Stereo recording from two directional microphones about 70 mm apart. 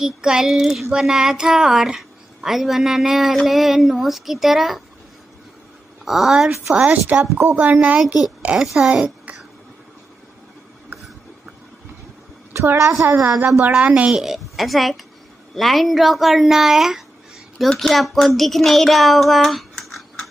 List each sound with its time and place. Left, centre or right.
0.0 s a woman's voice: centre
6.0 s a child's voice: centre
6.7 s speech: right
8.0 s a woman's voice: centre
9.0 s a sound: centre
12.5 s a woman's voice: right
13.6 s speech: centre
14.1 s a child's voice: centre